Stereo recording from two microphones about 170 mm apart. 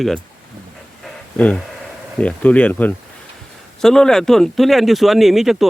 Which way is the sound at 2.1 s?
10° left (ahead or behind).